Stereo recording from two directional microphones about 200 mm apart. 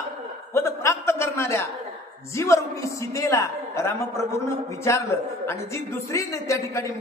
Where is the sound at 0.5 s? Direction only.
15° left (ahead or behind).